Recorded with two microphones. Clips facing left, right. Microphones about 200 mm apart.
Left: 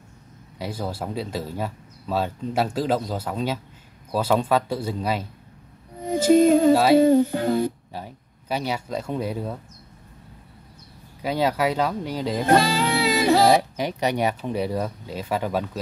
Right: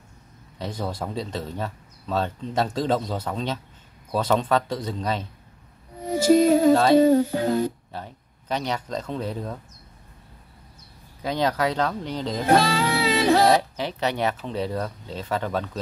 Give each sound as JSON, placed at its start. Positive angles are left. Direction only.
{"t": 0.6, "sound": "speech", "side_deg": 10}
{"t": 6.3, "sound": "music", "side_deg": -5}
{"t": 6.7, "sound": "speech", "side_deg": 10}
{"t": 11.2, "sound": "speech", "side_deg": 10}
{"t": 12.5, "sound": "music", "side_deg": 0}
{"t": 12.8, "sound": "speech", "side_deg": 15}